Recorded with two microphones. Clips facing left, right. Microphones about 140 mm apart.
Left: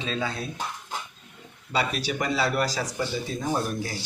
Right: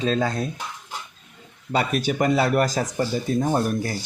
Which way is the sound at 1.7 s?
50° right (ahead or behind).